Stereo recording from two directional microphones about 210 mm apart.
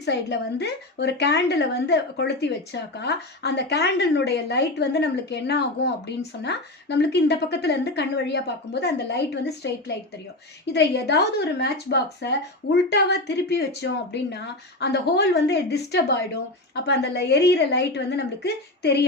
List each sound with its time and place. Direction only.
0.0 s a woman's voice: 55° left (ahead or behind)